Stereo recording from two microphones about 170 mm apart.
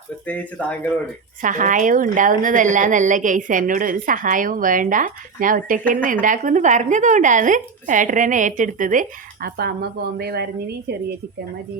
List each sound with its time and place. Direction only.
0.3 s speech: 10° left (ahead or behind)
1.4 s a woman's voice: 50° right (ahead or behind); by 10.9 s 70° right (ahead or behind)